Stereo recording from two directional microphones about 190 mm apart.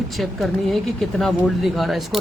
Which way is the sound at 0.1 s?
Centre (ahead or behind).